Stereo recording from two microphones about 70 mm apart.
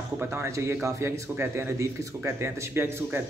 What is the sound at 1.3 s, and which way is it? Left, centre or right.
Speech, right.